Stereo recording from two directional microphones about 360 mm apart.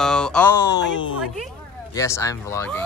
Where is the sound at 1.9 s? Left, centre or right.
Centre.